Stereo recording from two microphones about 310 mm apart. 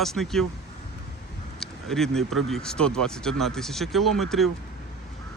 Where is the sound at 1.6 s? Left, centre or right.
Centre.